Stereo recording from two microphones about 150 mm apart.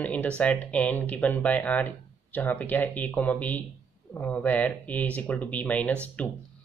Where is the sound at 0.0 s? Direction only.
10° left (ahead or behind).